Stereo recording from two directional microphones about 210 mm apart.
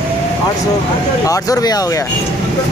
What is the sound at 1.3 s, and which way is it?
Speech, 15° left (ahead or behind).